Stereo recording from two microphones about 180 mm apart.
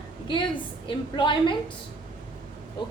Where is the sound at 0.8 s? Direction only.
25° left (ahead or behind).